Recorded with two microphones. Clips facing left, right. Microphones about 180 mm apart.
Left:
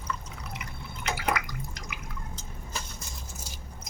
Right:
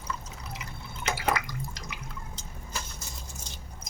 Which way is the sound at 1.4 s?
35° right (ahead or behind).